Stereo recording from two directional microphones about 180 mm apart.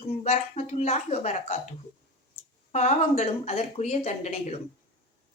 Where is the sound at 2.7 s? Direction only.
40° left (ahead or behind).